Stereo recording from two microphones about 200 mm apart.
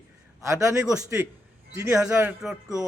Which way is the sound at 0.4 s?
15° right (ahead or behind).